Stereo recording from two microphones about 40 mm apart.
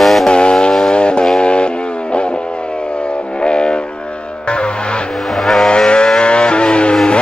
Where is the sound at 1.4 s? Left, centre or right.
Left.